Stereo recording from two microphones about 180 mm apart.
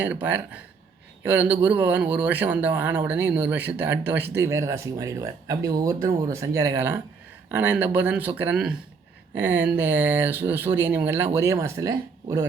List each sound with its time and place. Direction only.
0.0 s speech: 10° right (ahead or behind)